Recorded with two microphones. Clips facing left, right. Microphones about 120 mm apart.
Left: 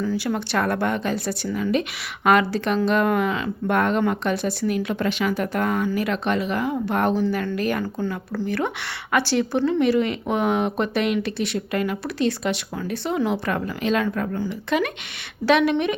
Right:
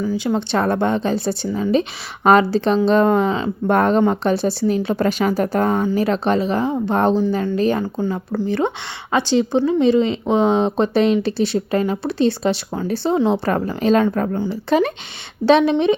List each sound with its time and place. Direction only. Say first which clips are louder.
0.0 s speech: right 4 dB; 15° right (ahead or behind)